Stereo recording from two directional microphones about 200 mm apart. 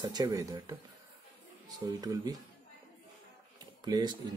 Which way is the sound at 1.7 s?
20° right (ahead or behind).